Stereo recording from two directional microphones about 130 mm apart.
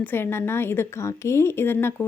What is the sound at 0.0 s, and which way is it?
A woman's voice, 15° left (ahead or behind).